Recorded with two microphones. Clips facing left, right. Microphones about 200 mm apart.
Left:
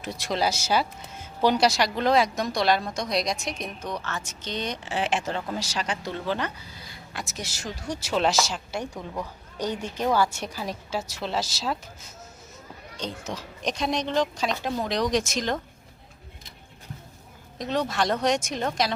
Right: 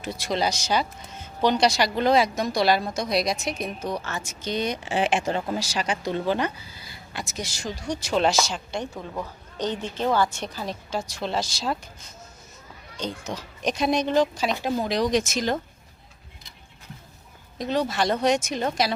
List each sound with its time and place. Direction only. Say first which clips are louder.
0.0 s a woman's voice: right 1 dB; centre (ahead or behind)
17.6 s speech: right 2 dB; centre (ahead or behind)